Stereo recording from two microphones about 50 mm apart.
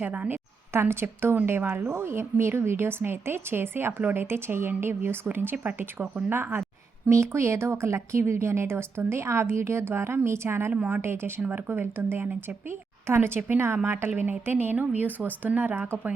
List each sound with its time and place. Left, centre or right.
0.0 s a woman's voice: right
0.7 s a woman's voice: right
1.8 s speech: right
2.0 s a woman's voice: right
7.1 s speech: right
10.7 s speech: right
11.0 s speech: right
11.3 s speech: right
11.7 s a woman's voice: right
12.2 s speech: right
12.6 s a woman's voice: right
14.1 s speech: right